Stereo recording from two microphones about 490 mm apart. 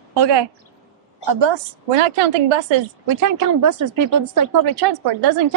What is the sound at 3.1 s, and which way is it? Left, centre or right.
A woman's voice, right.